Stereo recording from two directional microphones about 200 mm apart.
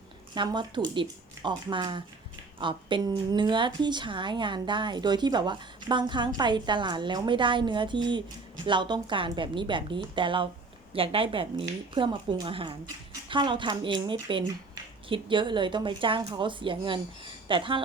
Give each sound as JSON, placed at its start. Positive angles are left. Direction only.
{"t": 0.3, "sound": "speech", "side_deg": -25}